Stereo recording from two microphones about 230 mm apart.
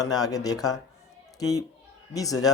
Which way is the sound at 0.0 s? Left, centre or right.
Centre.